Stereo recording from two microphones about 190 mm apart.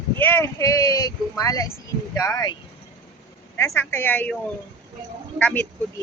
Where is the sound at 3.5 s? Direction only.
15° left (ahead or behind).